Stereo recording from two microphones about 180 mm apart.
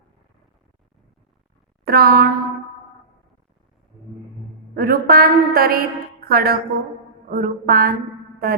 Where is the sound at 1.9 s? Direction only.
60° right (ahead or behind).